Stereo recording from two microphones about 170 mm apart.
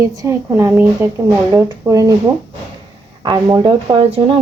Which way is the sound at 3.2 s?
25° right (ahead or behind).